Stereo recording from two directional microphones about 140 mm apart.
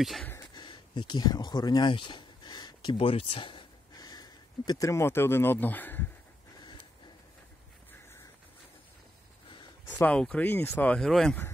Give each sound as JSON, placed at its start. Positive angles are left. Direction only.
{"t": 0.4, "sound": "speech", "side_deg": 35}
{"t": 9.8, "sound": "speech", "side_deg": 15}